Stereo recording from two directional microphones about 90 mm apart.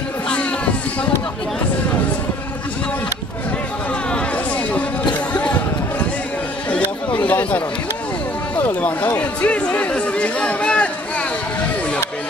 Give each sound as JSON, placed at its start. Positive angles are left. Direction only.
{"t": 5.3, "sound": "a sound", "side_deg": 15}
{"t": 7.2, "sound": "chatter", "side_deg": 20}
{"t": 8.5, "sound": "speech", "side_deg": 20}